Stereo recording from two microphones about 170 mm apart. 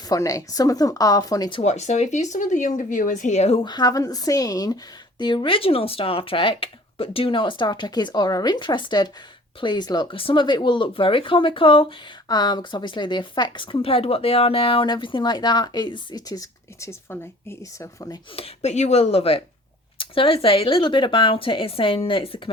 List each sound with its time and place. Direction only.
0.1 s speech: 20° left (ahead or behind)
1.6 s speech: 40° left (ahead or behind); by 18.2 s 20° left (ahead or behind)
18.3 s speech: 40° left (ahead or behind)